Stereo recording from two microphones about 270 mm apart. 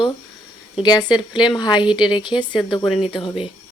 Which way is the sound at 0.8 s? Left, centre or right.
Centre.